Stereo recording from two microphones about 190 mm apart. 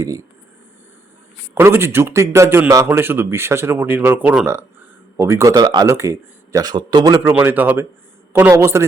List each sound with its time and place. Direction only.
1.5 s a man's voice: 10° right (ahead or behind)
7.3 s a man's voice: 10° right (ahead or behind)